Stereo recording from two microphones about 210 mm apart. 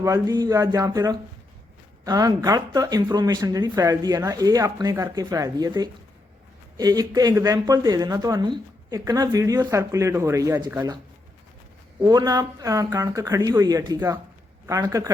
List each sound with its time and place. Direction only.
0.0 s speech: 15° right (ahead or behind)
12.0 s speech: 20° right (ahead or behind)